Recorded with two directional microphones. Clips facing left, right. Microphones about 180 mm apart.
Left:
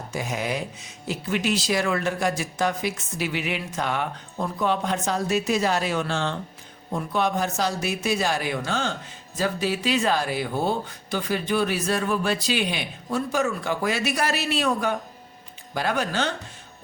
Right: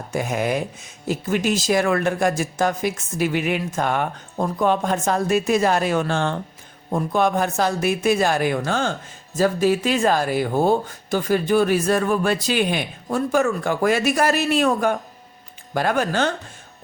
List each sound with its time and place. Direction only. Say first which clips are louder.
0.1 s speech: right 6 dB; 55° right (ahead or behind)